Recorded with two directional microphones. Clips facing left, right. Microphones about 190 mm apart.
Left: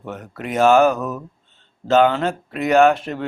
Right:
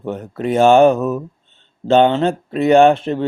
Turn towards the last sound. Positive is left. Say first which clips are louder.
# right 4 dB
turn(degrees=-25)  # may be behind; listen again after turning